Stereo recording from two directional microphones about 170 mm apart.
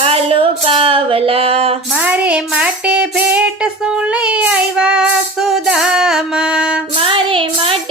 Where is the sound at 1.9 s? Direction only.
10° right (ahead or behind).